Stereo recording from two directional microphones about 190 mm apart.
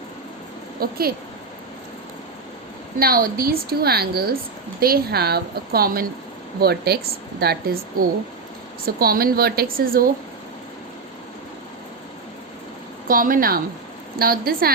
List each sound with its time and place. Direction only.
0.8 s a woman's voice: 50° right (ahead or behind)
3.0 s a woman's voice: 50° right (ahead or behind)
9.0 s a woman's voice: 50° right (ahead or behind)
13.1 s a woman's voice: 45° right (ahead or behind)